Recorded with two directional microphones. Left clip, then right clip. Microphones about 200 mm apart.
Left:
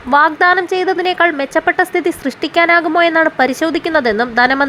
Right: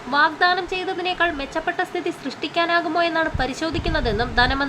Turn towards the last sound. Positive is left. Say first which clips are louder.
# left 8 dB
turn(degrees=35)  # may be behind; listen again after turning